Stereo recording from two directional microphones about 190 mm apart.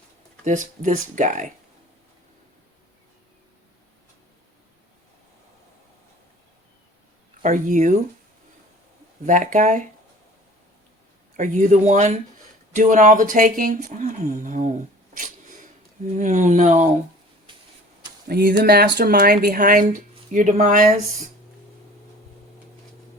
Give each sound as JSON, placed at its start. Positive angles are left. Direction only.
{"t": 0.4, "sound": "speech", "side_deg": -40}
{"t": 7.4, "sound": "speech", "side_deg": -40}
{"t": 9.2, "sound": "speech", "side_deg": -45}
{"t": 11.3, "sound": "speech", "side_deg": -40}
{"t": 15.1, "sound": "sneeze", "side_deg": -45}
{"t": 16.1, "sound": "speech", "side_deg": -40}
{"t": 18.3, "sound": "speech", "side_deg": -50}